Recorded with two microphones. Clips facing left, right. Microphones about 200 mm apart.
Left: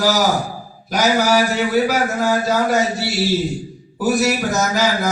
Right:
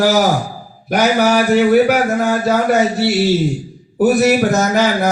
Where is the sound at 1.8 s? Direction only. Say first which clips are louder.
Right 4 dB; 60° right (ahead or behind).